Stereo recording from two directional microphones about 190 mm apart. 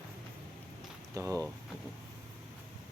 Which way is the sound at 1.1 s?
15° right (ahead or behind).